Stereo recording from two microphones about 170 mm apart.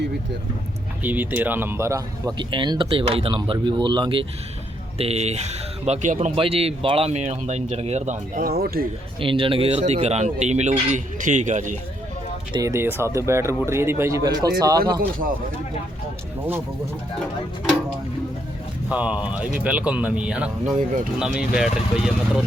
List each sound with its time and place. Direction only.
1.0 s speech: 10° right (ahead or behind); by 8.4 s 45° right (ahead or behind)
8.4 s speech: 65° right (ahead or behind)
9.2 s speech: 30° right (ahead or behind); by 11.8 s 45° right (ahead or behind)
12.5 s speech: 15° right (ahead or behind)
18.9 s speech: 10° right (ahead or behind)
20.7 s speech: 45° right (ahead or behind)
21.2 s speech: 5° right (ahead or behind)